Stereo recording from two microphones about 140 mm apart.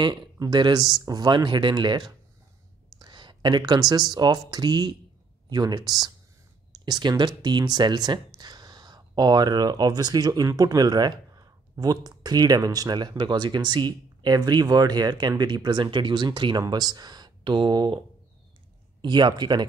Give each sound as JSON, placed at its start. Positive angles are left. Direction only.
{"t": 0.0, "sound": "speech", "side_deg": -30}
{"t": 3.0, "sound": "a sound", "side_deg": -35}
{"t": 3.9, "sound": "speech", "side_deg": -30}